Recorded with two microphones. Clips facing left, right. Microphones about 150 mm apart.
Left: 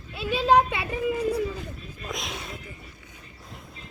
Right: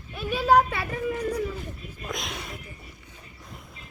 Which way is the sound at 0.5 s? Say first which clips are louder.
Right 2 dB; 15° left (ahead or behind).